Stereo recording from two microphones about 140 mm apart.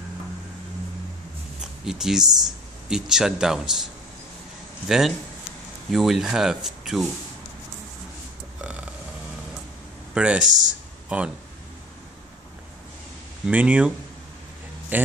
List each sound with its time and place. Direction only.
1.6 s speech: 5° right (ahead or behind)
4.8 s speech: centre (ahead or behind)
8.5 s burping: 10° right (ahead or behind)
10.1 s speech: 5° right (ahead or behind)
10.4 s speech: 60° right (ahead or behind)
11.1 s speech: 10° right (ahead or behind)
13.5 s speech: 10° right (ahead or behind)